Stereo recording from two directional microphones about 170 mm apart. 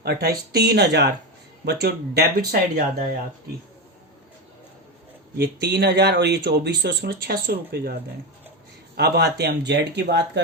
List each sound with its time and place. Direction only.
0.0 s speech: 70° right (ahead or behind)
5.4 s speech: 75° right (ahead or behind)
9.0 s speech: 80° right